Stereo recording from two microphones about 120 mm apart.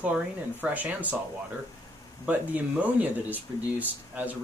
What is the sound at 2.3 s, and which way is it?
Speech, 15° right (ahead or behind).